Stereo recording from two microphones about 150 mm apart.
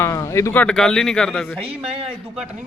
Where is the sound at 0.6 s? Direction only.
5° left (ahead or behind).